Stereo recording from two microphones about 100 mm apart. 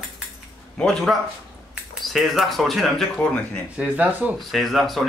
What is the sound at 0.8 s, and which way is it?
Speech, 5° left (ahead or behind).